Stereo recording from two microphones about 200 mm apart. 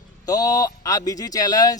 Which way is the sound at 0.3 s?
20° left (ahead or behind).